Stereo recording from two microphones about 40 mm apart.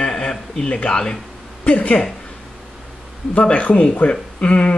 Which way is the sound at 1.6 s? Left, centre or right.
Left.